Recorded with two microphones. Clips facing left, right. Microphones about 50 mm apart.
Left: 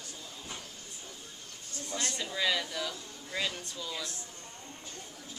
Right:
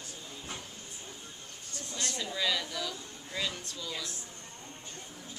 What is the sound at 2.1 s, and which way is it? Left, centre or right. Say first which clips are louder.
Speech: left 1 dB; centre.